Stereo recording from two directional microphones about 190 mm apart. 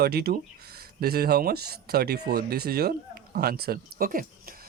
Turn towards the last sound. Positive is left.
turn(degrees=-50)  # may be behind; listen again after turning